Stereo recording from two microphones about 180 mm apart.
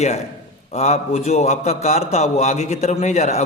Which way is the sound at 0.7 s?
40° left (ahead or behind).